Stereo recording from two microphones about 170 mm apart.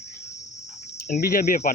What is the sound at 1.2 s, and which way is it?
Cricket, 60° left (ahead or behind).